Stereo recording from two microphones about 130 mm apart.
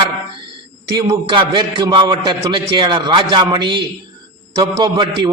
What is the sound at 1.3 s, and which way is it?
A man's voice, 35° right (ahead or behind).